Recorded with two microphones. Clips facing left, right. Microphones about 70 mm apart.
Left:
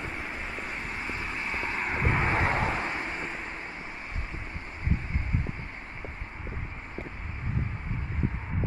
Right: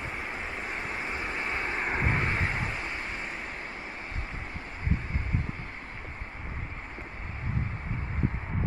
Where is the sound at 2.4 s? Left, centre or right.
Left.